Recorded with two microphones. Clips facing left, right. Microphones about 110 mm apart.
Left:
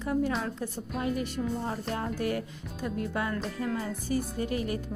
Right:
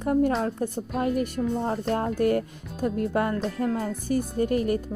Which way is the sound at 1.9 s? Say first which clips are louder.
Right 8 dB; 45° right (ahead or behind).